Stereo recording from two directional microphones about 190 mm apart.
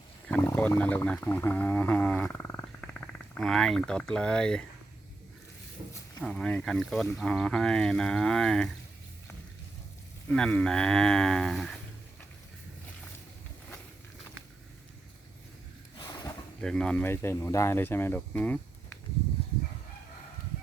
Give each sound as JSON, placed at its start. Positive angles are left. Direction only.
{"t": 0.3, "sound": "speech", "side_deg": 5}
{"t": 6.2, "sound": "speech", "side_deg": 5}
{"t": 10.3, "sound": "speech", "side_deg": 5}
{"t": 16.0, "sound": "a sound", "side_deg": 20}
{"t": 16.6, "sound": "speech", "side_deg": 5}